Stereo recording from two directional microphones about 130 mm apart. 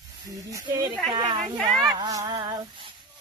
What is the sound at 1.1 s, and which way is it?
Speech, 35° right (ahead or behind).